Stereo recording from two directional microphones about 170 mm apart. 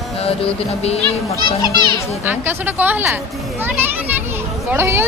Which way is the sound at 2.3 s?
10° right (ahead or behind).